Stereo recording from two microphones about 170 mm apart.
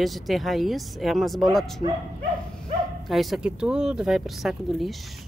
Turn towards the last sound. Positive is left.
turn(degrees=0)  # may be behind; listen again after turning